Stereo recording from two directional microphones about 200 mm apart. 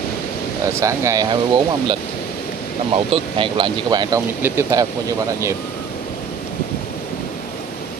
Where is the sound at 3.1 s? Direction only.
25° right (ahead or behind).